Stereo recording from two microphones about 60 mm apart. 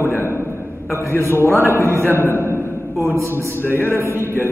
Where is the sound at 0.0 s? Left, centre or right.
Left.